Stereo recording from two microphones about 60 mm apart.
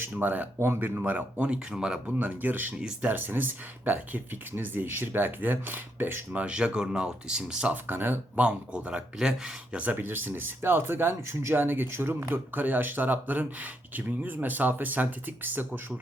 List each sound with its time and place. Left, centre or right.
0.2 s speech: right
1.5 s speech: centre
2.1 s speech: right
2.7 s speech: centre
3.1 s speech: right
6.3 s speech: centre
7.7 s speech: right
8.4 s speech: centre
9.8 s speech: right